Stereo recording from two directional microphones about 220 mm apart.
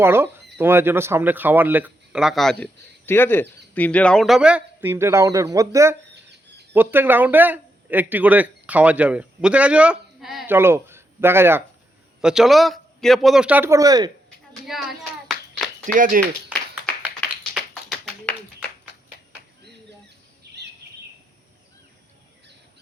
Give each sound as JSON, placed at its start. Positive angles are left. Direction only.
{"t": 0.0, "sound": "speech", "side_deg": -10}
{"t": 14.7, "sound": "speech", "side_deg": 0}
{"t": 15.3, "sound": "clapping", "side_deg": 0}
{"t": 16.0, "sound": "speech", "side_deg": -35}
{"t": 16.5, "sound": "a sound", "side_deg": -5}
{"t": 17.2, "sound": "clapping", "side_deg": 0}